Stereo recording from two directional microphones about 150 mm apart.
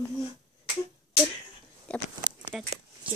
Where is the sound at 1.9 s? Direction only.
5° left (ahead or behind).